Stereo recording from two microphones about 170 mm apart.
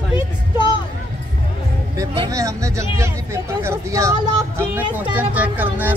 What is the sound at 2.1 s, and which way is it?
Speech, 20° right (ahead or behind).